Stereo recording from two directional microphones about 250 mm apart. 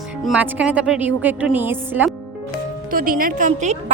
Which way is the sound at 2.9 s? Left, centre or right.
Right.